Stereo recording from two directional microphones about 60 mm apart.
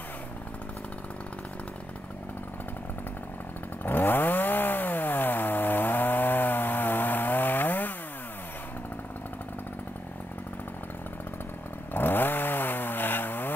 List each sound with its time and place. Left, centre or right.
3.8 s chainsaw: left
11.9 s chainsaw: left